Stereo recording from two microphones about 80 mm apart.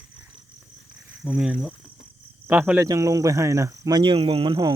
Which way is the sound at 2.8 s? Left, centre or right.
Right.